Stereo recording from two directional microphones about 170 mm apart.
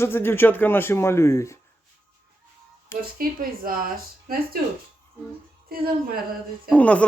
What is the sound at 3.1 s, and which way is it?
Speech, 55° right (ahead or behind).